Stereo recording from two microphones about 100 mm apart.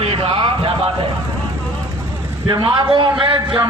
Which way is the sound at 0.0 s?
65° right (ahead or behind).